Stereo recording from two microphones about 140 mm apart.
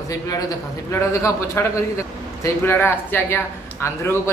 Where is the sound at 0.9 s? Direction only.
20° left (ahead or behind).